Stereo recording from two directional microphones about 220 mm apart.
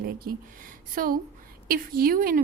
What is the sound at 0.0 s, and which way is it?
A woman's voice, 40° right (ahead or behind).